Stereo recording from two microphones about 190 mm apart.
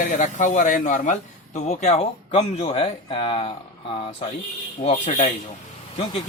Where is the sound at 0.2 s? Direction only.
40° left (ahead or behind).